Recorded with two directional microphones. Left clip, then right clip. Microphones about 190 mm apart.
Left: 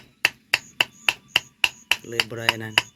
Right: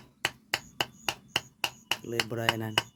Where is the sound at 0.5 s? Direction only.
15° right (ahead or behind).